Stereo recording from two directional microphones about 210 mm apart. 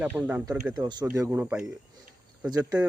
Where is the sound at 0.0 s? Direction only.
5° right (ahead or behind).